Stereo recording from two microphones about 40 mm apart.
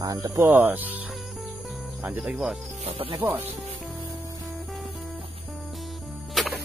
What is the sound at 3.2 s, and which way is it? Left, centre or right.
Speech, right.